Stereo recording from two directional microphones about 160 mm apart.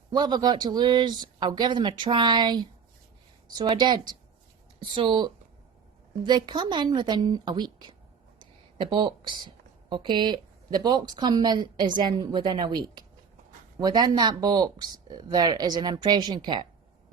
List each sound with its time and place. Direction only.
0.1 s a woman's voice: 25° right (ahead or behind)
8.4 s a sound: 30° right (ahead or behind)
9.9 s a woman's voice: 30° right (ahead or behind)